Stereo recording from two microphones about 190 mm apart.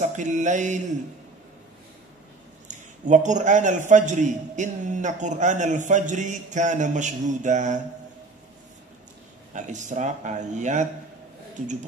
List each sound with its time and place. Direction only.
0.0 s a man's voice: 40° right (ahead or behind)
2.7 s a man's voice: 40° right (ahead or behind)
9.5 s a man's voice: 40° right (ahead or behind)